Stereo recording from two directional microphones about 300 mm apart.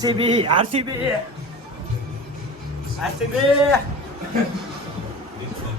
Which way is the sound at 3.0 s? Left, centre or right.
Centre.